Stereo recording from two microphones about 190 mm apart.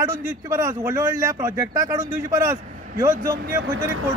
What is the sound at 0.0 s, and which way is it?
Speech, 15° right (ahead or behind).